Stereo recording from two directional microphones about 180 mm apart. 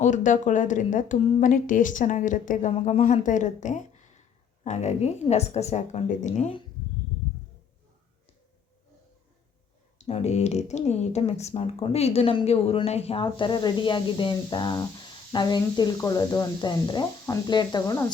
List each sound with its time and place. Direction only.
0.0 s a woman's voice: 45° left (ahead or behind)
10.0 s speech: 35° left (ahead or behind); by 18.1 s 15° left (ahead or behind)